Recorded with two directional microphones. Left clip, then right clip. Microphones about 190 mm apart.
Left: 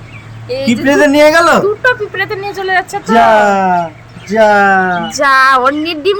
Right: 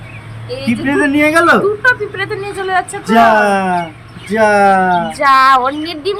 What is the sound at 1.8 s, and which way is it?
Speech, 20° left (ahead or behind).